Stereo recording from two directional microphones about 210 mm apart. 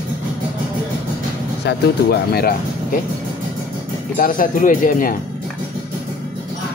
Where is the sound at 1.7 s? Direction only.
50° left (ahead or behind).